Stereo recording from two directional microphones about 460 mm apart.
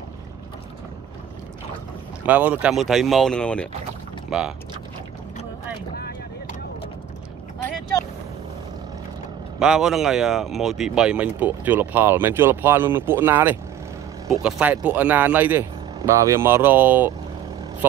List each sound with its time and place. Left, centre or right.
2.2 s speech: centre
5.9 s vehicle: centre
9.6 s speech: centre